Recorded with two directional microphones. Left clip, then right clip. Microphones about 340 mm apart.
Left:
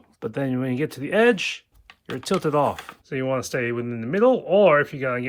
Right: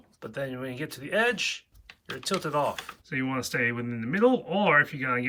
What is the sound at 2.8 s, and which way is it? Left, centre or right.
Speech, centre.